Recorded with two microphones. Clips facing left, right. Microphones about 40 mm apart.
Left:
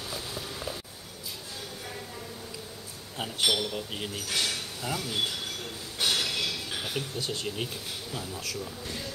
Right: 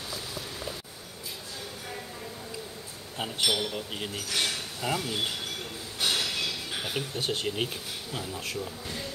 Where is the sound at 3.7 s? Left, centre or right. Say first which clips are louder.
Even; centre.